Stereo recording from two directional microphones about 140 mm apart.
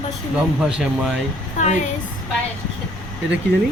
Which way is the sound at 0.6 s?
5° right (ahead or behind).